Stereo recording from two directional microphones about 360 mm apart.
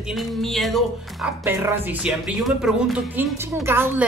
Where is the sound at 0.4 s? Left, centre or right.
Centre.